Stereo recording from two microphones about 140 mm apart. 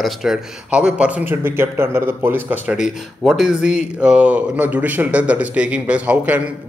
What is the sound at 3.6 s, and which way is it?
Speech, 55° left (ahead or behind).